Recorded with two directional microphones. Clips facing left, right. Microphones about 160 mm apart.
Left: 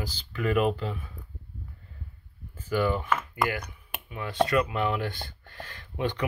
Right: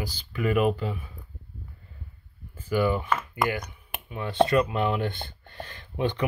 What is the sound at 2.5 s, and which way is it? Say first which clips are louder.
Speech: right 2 dB; 10° right (ahead or behind).